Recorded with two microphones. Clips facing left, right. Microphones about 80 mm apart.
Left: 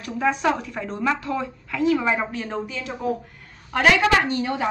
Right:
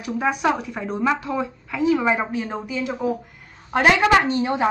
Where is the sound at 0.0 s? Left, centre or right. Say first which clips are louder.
Even; centre.